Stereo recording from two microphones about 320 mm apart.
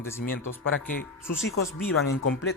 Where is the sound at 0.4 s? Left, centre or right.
Left.